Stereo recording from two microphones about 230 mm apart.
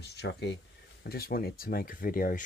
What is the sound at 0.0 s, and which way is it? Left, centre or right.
Speech, left.